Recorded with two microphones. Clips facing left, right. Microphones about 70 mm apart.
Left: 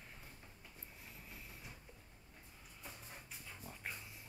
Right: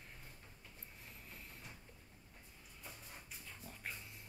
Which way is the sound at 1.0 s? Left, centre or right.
Centre.